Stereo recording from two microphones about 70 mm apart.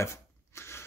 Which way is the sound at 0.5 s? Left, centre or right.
Left.